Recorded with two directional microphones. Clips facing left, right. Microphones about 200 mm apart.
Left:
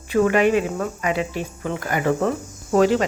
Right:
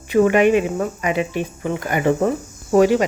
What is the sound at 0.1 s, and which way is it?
Speech, 20° right (ahead or behind).